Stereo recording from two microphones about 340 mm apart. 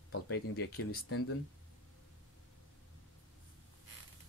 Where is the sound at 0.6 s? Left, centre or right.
Left.